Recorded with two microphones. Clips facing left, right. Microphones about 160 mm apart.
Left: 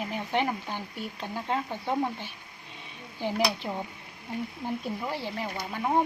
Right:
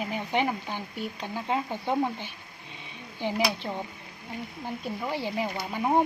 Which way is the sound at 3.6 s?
5° left (ahead or behind).